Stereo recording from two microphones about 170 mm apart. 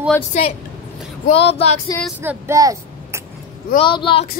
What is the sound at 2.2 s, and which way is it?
A child's voice, 15° right (ahead or behind).